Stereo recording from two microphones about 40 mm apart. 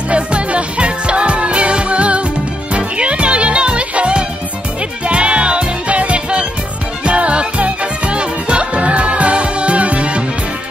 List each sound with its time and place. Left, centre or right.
0.1 s music: right